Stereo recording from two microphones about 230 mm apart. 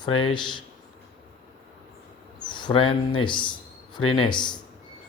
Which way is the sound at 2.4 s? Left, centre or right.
Centre.